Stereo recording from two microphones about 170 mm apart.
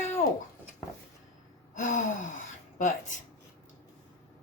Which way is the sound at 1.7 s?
50° left (ahead or behind).